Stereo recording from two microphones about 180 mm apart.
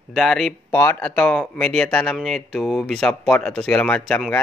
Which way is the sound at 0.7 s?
15° left (ahead or behind).